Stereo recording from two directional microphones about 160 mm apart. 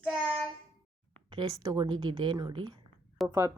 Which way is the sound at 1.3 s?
25° right (ahead or behind).